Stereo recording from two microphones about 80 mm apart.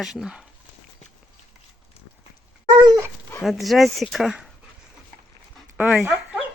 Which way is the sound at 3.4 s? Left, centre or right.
Centre.